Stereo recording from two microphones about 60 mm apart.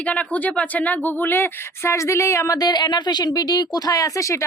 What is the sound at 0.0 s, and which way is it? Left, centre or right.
Speech, left.